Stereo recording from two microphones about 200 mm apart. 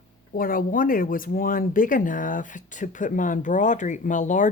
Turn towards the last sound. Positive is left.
turn(degrees=40)  # may be behind; listen again after turning